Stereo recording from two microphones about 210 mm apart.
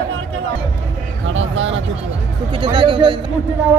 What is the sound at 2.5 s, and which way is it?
Speech, 20° right (ahead or behind).